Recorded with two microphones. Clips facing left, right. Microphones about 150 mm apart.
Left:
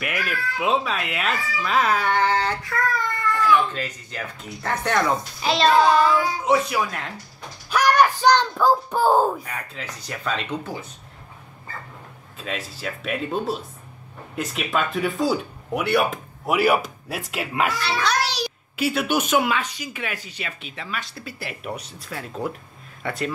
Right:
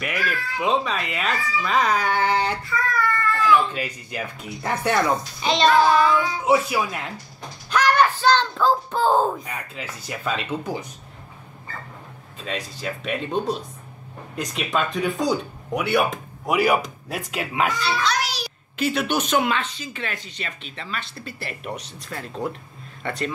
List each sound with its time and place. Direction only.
0.0 s speech: 5° left (ahead or behind)
2.2 s speech: 10° right (ahead or behind)
2.9 s a sound: 20° left (ahead or behind)
3.5 s speech: 10° right (ahead or behind)
5.4 s speech: centre (ahead or behind)
7.7 s a sound: 10° left (ahead or behind)
9.4 s speech: 10° right (ahead or behind)
12.4 s speech: 5° left (ahead or behind)